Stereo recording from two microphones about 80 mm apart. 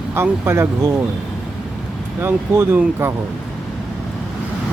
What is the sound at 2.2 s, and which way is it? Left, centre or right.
Speech, right.